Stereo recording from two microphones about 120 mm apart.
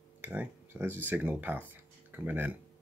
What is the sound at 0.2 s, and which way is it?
Speech, 15° right (ahead or behind).